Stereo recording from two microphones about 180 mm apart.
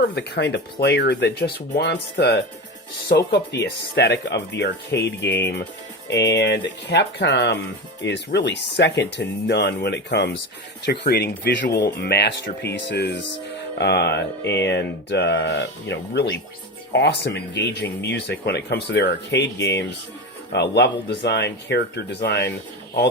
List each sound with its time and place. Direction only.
0.1 s speech: 70° left (ahead or behind)